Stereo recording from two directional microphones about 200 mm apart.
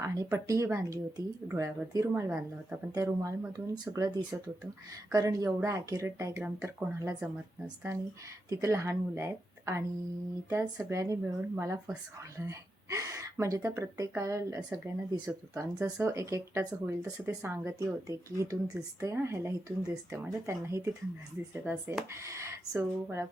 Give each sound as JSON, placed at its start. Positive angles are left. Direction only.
{"t": 0.0, "sound": "speech", "side_deg": -15}
{"t": 8.4, "sound": "speech", "side_deg": -15}